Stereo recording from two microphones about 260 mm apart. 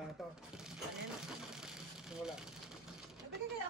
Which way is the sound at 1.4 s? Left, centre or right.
Centre.